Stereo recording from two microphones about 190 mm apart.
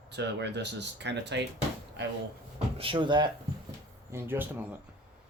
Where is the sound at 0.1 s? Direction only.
65° right (ahead or behind).